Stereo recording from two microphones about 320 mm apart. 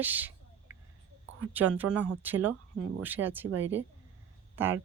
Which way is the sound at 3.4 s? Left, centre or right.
Right.